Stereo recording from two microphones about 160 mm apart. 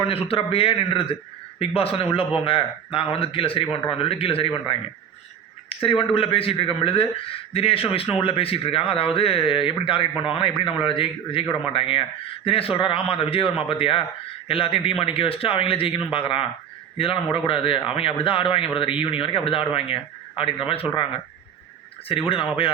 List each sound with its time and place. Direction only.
0.0 s speech: 35° left (ahead or behind)
22.1 s speech: 35° left (ahead or behind)